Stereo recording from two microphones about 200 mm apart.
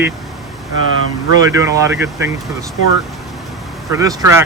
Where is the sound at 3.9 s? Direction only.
15° right (ahead or behind).